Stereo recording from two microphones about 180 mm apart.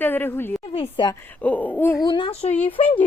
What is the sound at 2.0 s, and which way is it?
Speech, 25° left (ahead or behind).